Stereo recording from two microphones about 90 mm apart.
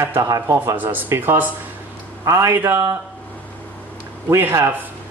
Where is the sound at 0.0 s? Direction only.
35° right (ahead or behind).